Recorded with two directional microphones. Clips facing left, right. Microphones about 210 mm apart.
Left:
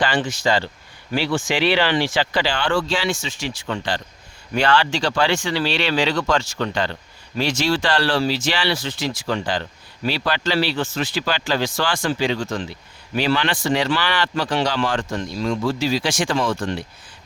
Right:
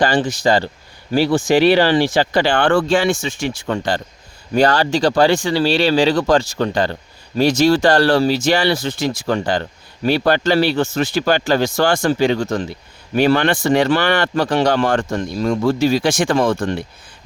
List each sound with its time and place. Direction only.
0.0 s speech: 40° right (ahead or behind)
8.9 s speech: 50° right (ahead or behind)